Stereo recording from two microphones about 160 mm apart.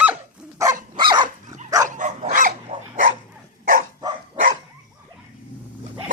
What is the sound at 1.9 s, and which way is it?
Dog, 50° right (ahead or behind).